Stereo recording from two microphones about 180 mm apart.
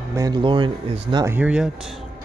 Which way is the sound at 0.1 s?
20° right (ahead or behind).